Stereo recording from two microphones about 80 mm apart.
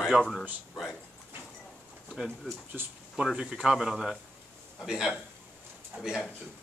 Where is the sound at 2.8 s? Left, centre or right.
Right.